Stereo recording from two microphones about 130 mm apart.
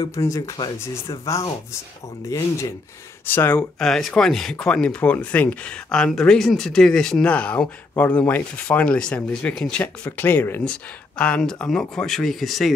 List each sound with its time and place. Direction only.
0.0 s speech: 25° left (ahead or behind)
3.8 s speech: 5° left (ahead or behind)